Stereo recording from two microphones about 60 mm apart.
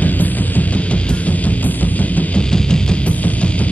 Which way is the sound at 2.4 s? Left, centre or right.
Centre.